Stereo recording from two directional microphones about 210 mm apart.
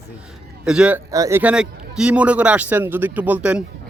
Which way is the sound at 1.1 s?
15° right (ahead or behind).